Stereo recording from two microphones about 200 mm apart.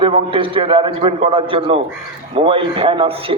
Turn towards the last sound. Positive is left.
turn(degrees=-25)  # may be behind; listen again after turning